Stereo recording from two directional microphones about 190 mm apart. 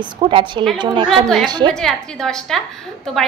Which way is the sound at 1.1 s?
Centre (ahead or behind).